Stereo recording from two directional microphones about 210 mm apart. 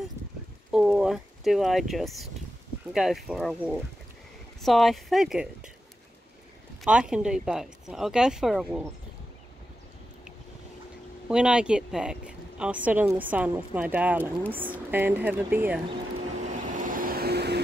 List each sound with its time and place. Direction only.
0.7 s speech: 5° right (ahead or behind)
6.8 s speech: 5° right (ahead or behind)
11.2 s speech: 5° right (ahead or behind)
16.4 s vehicle: 35° right (ahead or behind)